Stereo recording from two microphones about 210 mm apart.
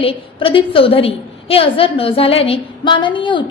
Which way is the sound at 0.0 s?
25° left (ahead or behind).